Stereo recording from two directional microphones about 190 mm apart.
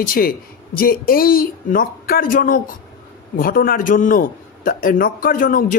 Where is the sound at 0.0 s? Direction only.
50° left (ahead or behind).